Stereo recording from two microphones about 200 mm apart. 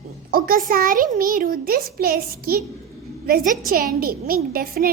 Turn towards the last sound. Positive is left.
turn(degrees=-50)  # may be behind; listen again after turning